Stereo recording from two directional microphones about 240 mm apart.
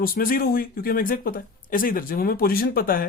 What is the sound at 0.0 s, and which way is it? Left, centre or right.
Speech, left.